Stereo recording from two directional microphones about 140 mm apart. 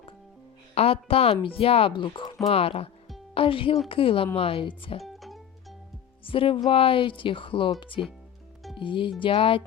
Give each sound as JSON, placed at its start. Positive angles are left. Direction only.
{"t": 0.7, "sound": "speech", "side_deg": 45}
{"t": 5.0, "sound": "music", "side_deg": 0}
{"t": 6.2, "sound": "speech", "side_deg": 40}